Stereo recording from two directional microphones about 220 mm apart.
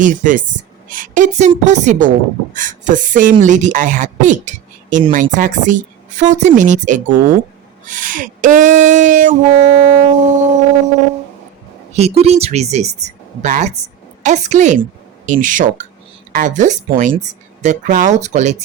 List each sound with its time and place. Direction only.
0.0 s a woman's voice: 35° right (ahead or behind)
11.9 s a woman's voice: 30° right (ahead or behind)